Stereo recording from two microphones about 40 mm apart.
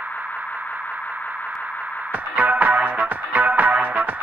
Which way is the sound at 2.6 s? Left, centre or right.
Right.